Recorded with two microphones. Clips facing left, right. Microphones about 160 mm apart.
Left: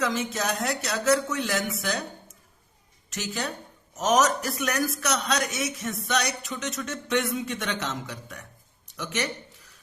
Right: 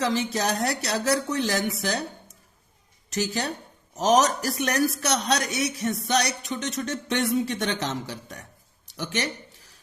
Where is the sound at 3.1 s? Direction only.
35° right (ahead or behind).